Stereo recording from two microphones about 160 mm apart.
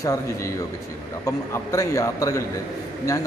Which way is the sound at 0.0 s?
20° left (ahead or behind).